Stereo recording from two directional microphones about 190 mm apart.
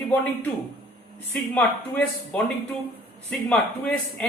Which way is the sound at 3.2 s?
5° left (ahead or behind).